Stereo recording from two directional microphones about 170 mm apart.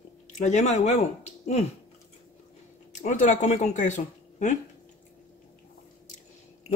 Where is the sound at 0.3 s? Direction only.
45° left (ahead or behind).